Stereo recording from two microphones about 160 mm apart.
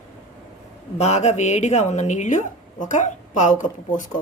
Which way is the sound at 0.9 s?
45° left (ahead or behind).